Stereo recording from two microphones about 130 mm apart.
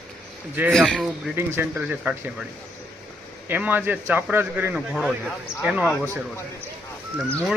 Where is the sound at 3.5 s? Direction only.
15° right (ahead or behind).